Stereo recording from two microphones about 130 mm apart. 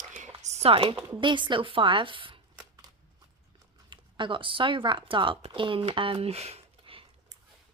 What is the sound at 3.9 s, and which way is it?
Speech, 40° right (ahead or behind).